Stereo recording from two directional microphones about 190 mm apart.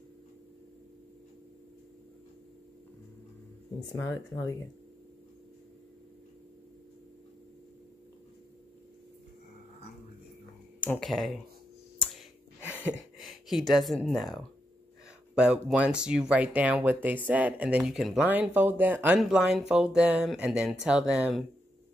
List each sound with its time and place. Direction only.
3.9 s speech: 15° left (ahead or behind)
10.8 s speech: 5° left (ahead or behind)
12.0 s a sound: centre (ahead or behind)
13.2 s speech: centre (ahead or behind)